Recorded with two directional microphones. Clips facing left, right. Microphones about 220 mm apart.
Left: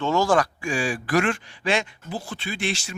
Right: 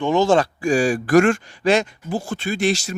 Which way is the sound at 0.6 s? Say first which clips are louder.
Right 8 dB; 40° right (ahead or behind).